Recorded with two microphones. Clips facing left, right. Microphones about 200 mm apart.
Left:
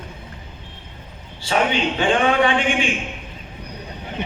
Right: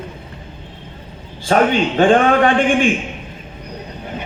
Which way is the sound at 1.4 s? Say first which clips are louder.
Right 6 dB; 50° right (ahead or behind).